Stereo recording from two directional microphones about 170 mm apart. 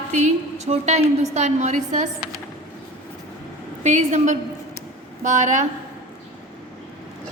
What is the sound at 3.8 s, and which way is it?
A woman's voice, 45° right (ahead or behind).